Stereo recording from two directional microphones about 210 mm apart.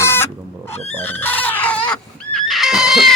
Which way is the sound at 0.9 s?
10° left (ahead or behind).